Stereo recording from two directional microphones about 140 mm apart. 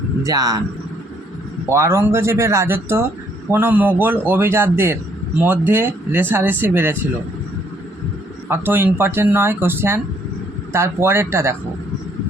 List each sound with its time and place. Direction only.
0.3 s speech: 25° right (ahead or behind)
1.7 s speech: 20° right (ahead or behind)
8.4 s speech: 15° right (ahead or behind)